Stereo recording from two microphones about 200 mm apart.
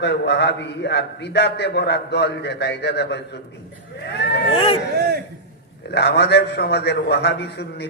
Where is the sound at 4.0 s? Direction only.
55° left (ahead or behind).